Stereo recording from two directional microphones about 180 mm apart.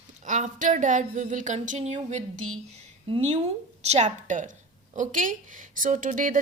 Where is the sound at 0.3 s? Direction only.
45° right (ahead or behind).